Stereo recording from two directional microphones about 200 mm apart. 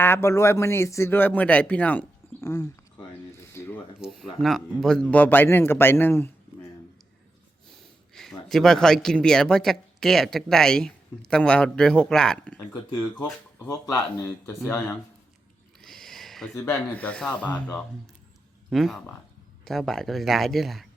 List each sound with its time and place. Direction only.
0.0 s speech: 10° left (ahead or behind)
3.3 s a sound: 15° left (ahead or behind)
4.0 s speech: centre (ahead or behind)
7.7 s a man's voice: centre (ahead or behind)
13.7 s speech: 15° left (ahead or behind)
15.8 s a sound: centre (ahead or behind)
16.6 s a man's voice: 10° left (ahead or behind)